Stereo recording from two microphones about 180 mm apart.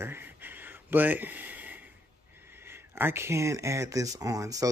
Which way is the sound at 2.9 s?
15° right (ahead or behind).